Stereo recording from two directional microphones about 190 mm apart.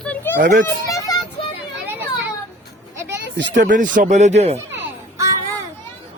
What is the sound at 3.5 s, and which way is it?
Speech, 45° right (ahead or behind).